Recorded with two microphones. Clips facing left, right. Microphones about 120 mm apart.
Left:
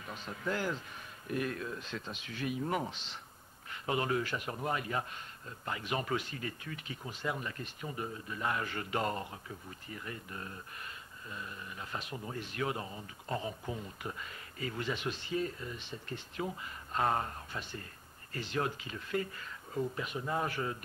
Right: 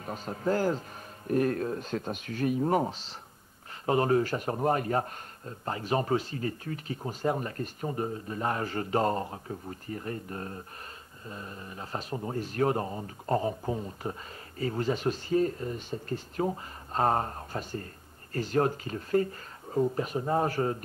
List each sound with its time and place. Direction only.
0.0 s a man's voice: 40° right (ahead or behind)